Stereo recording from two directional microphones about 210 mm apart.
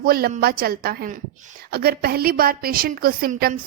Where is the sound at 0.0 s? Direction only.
45° right (ahead or behind).